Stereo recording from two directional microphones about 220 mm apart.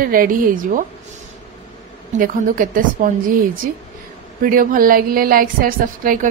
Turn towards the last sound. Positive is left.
turn(degrees=-40)  # may be behind; listen again after turning